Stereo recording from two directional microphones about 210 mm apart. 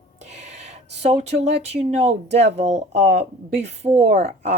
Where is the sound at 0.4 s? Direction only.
30° right (ahead or behind).